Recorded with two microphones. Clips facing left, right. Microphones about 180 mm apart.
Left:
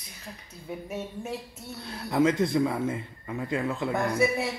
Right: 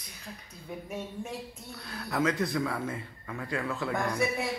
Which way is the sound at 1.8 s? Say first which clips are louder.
Left 6 dB; 25° left (ahead or behind).